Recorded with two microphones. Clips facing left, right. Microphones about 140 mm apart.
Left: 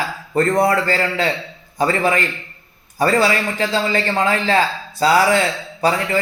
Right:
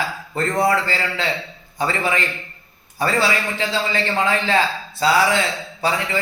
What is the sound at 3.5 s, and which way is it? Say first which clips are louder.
A man's voice: left 3 dB; 40° left (ahead or behind).